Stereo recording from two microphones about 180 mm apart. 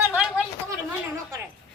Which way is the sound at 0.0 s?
5° right (ahead or behind).